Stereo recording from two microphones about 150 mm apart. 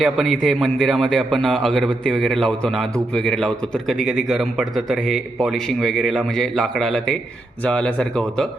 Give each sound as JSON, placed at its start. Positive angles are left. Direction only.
{"t": 0.0, "sound": "a man's voice", "side_deg": 0}